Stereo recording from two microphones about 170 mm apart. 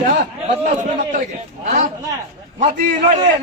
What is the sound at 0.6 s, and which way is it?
Speech, 45° right (ahead or behind).